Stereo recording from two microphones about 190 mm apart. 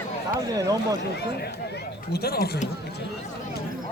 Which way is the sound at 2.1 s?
55° left (ahead or behind).